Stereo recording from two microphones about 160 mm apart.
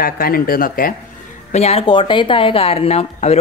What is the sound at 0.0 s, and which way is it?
Speech, 65° left (ahead or behind).